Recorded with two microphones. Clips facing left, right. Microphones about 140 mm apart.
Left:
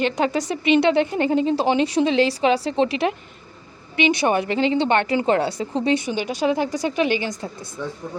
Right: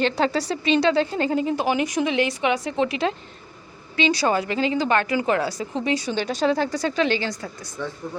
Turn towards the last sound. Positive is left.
turn(degrees=5)  # may be behind; listen again after turning